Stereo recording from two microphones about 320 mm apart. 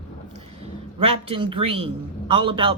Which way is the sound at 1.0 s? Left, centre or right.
Centre.